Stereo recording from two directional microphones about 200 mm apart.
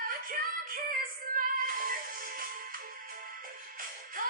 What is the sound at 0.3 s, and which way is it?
Music, 45° right (ahead or behind).